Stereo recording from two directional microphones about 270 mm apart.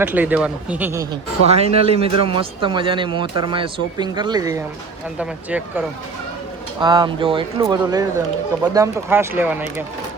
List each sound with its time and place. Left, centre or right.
0.0 s speech: centre
1.5 s speech: right; by 9.8 s centre